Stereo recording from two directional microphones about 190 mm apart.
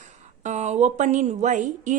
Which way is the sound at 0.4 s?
35° right (ahead or behind).